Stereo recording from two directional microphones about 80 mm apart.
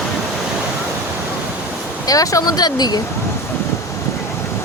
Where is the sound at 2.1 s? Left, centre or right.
Left.